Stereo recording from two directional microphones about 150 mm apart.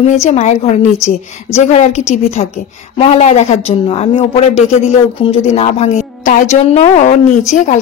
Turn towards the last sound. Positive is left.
turn(degrees=55)  # may be behind; listen again after turning